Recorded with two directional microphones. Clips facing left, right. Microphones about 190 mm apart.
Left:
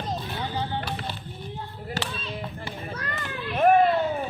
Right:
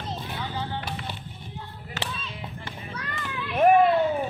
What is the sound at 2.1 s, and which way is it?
Tap, 40° left (ahead or behind).